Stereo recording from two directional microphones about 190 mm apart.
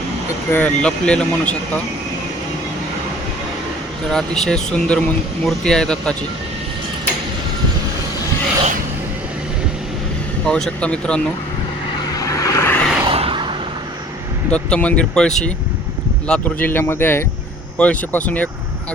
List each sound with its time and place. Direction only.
0.5 s speech: 5° left (ahead or behind)
4.1 s speech: 5° left (ahead or behind)
10.4 s speech: 5° left (ahead or behind)
12.1 s vehicle: 15° left (ahead or behind)
13.1 s a sound: 30° right (ahead or behind)
14.5 s speech: 5° left (ahead or behind)